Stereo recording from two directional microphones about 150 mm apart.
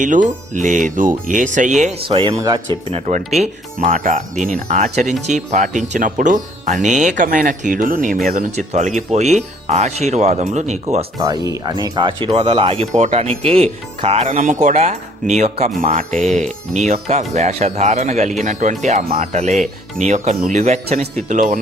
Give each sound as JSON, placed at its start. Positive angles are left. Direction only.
{"t": 0.0, "sound": "speech", "side_deg": -60}
{"t": 2.0, "sound": "speech", "side_deg": -35}
{"t": 2.3, "sound": "speech", "side_deg": -25}
{"t": 2.9, "sound": "speech", "side_deg": -50}
{"t": 11.4, "sound": "speech", "side_deg": -25}